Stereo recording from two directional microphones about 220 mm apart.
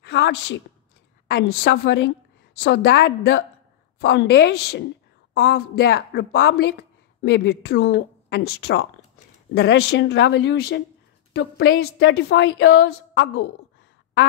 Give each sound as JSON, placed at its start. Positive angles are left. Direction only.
{"t": 0.0, "sound": "a woman's voice", "side_deg": 50}